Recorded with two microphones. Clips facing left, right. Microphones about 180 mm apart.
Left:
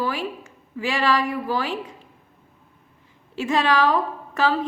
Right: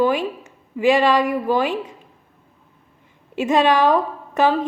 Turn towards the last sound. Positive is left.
turn(degrees=-20)  # may be behind; listen again after turning